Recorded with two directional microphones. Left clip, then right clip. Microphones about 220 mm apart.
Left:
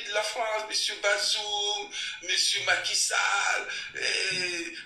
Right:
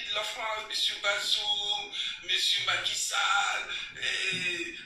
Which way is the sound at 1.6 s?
25° left (ahead or behind).